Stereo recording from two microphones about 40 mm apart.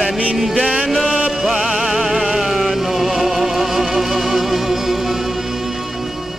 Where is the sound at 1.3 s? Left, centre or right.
Centre.